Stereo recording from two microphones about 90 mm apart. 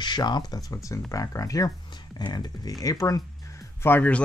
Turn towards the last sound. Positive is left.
turn(degrees=20)  # may be behind; listen again after turning